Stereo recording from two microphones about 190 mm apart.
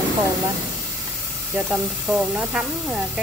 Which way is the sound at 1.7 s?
5° right (ahead or behind).